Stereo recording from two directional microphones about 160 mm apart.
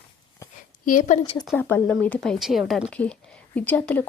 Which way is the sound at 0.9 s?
50° left (ahead or behind).